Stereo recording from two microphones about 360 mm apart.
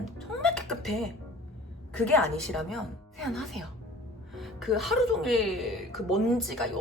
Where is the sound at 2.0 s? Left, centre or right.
Left.